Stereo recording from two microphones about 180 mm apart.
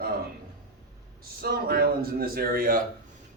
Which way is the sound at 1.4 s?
60° right (ahead or behind).